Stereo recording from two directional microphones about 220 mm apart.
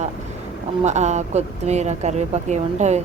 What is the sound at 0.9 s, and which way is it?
A woman's voice, 30° right (ahead or behind).